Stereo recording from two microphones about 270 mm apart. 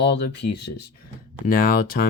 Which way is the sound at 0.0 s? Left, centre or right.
Left.